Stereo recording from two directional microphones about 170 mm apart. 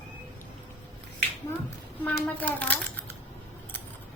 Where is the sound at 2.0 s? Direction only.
10° left (ahead or behind).